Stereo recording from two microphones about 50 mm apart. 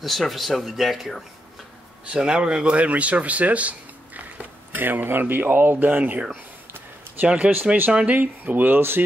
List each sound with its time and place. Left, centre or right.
0.0 s speech: centre
2.0 s speech: centre; by 6.2 s right
7.2 s speech: right
8.2 s speech: right